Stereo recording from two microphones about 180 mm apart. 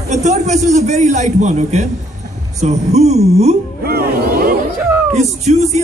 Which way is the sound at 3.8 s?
60° right (ahead or behind).